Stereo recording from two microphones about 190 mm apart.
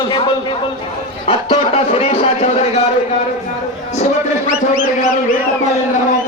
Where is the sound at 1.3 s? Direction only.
30° left (ahead or behind).